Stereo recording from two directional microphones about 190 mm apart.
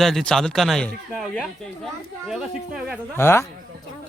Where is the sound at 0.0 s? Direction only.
Centre (ahead or behind).